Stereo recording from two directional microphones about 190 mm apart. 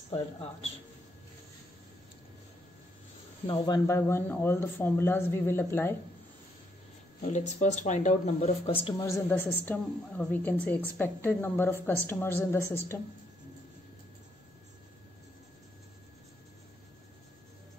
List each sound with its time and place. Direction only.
3.4 s a woman's voice: 20° left (ahead or behind)
7.2 s speech: 40° left (ahead or behind)
8.8 s a woman's voice: 15° left (ahead or behind)